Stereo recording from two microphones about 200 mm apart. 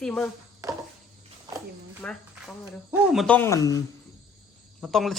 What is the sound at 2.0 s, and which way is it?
Speech, 5° left (ahead or behind).